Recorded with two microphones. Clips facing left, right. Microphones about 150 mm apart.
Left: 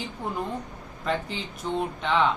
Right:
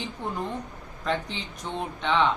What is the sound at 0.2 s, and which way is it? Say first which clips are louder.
Speech: left 1 dB; 5° left (ahead or behind).